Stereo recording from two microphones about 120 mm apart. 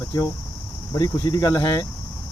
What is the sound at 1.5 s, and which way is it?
Speech, 20° left (ahead or behind).